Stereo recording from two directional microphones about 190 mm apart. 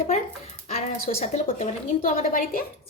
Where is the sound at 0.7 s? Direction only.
35° left (ahead or behind).